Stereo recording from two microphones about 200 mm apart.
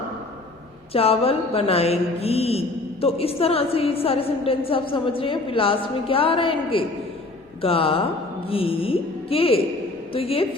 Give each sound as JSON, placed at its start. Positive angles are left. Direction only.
{"t": 0.9, "sound": "mantra", "side_deg": 30}
{"t": 7.6, "sound": "music", "side_deg": 30}
{"t": 10.1, "sound": "a woman's voice", "side_deg": 30}